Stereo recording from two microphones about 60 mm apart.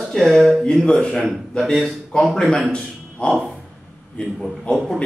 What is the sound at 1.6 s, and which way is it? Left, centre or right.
Speech, centre.